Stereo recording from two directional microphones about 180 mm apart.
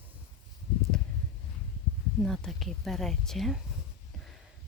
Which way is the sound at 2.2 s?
Centre (ahead or behind).